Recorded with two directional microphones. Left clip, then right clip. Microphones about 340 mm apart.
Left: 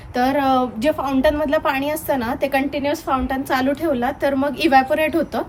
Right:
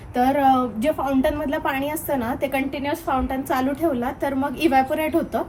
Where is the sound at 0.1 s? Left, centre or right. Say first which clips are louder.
Even; centre.